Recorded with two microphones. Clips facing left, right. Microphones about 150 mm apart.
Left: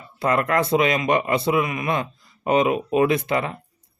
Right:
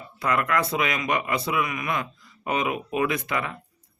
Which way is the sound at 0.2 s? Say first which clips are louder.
Left 4 dB; 30° left (ahead or behind).